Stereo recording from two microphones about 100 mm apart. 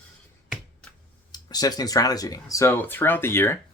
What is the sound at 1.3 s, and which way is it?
Speech, 40° left (ahead or behind).